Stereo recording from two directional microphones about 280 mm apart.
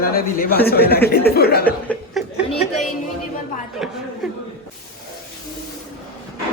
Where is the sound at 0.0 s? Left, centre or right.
Left.